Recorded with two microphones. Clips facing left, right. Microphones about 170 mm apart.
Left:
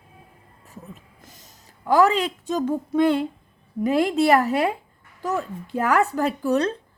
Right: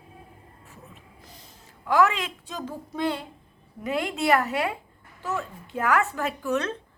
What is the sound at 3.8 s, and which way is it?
Speech, 35° left (ahead or behind).